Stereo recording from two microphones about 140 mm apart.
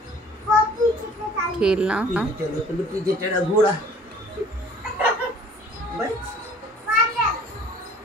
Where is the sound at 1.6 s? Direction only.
5° right (ahead or behind).